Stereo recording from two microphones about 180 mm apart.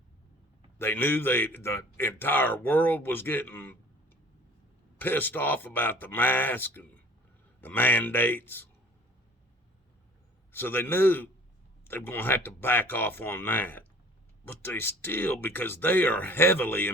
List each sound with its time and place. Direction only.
0.8 s a man's voice: 10° left (ahead or behind)
4.9 s a man's voice: 10° left (ahead or behind)
10.5 s a man's voice: 10° left (ahead or behind)